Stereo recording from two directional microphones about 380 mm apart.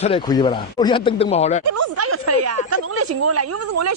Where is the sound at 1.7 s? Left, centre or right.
Right.